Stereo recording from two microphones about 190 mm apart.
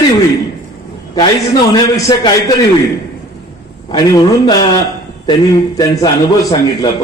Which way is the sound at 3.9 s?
20° left (ahead or behind).